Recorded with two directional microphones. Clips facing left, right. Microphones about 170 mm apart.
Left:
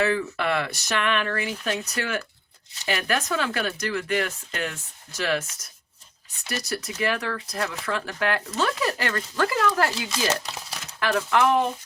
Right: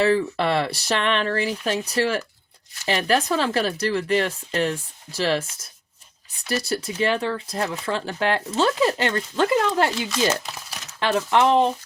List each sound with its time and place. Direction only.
0.0 s speech: 30° right (ahead or behind)
6.5 s speech: 30° right (ahead or behind)
11.0 s speech: 25° right (ahead or behind)